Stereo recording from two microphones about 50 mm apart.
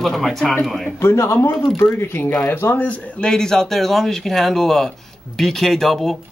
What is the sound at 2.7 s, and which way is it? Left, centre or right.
Speech, left.